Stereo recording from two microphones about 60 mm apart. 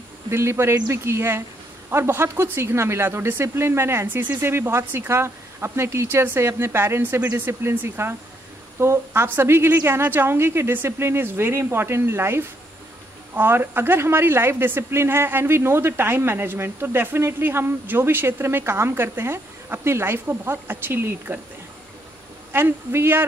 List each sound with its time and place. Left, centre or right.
0.3 s a woman's voice: right
8.7 s a woman's voice: right
22.5 s speech: right